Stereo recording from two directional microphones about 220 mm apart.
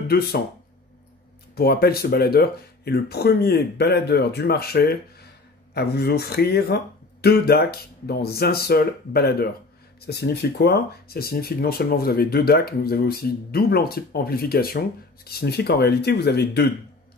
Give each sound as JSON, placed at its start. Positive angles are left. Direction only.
{"t": 1.5, "sound": "speech", "side_deg": 45}